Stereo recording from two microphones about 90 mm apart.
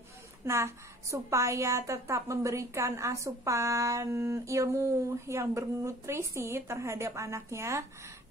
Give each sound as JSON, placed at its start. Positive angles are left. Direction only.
{"t": 0.5, "sound": "a woman's voice", "side_deg": -30}